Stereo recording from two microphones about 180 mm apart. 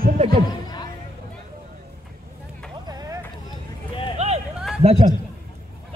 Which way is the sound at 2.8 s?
20° right (ahead or behind).